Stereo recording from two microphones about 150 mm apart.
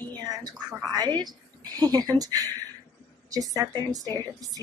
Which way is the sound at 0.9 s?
25° right (ahead or behind).